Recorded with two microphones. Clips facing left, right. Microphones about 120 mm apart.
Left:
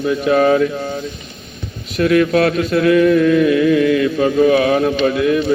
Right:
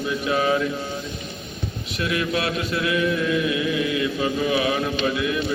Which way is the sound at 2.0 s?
50° left (ahead or behind).